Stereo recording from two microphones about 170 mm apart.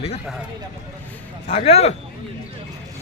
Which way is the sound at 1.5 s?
35° left (ahead or behind).